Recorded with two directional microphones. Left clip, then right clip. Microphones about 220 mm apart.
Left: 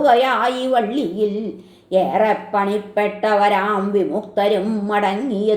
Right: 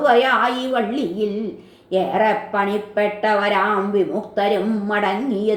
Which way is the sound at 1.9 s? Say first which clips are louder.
Left 2 dB; 35° left (ahead or behind).